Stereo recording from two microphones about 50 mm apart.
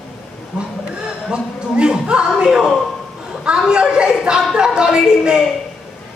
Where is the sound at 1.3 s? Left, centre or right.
Centre.